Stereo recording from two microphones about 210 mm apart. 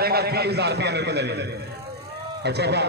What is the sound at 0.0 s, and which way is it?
A man's voice, 50° right (ahead or behind).